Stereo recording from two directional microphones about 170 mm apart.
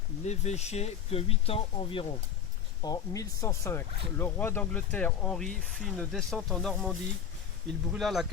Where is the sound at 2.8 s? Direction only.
20° left (ahead or behind); by 6.9 s centre (ahead or behind).